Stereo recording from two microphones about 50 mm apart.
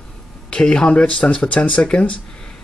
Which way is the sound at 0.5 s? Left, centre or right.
Centre.